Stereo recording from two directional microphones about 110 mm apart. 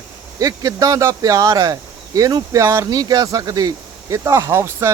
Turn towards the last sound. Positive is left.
turn(degrees=-25)  # may be behind; listen again after turning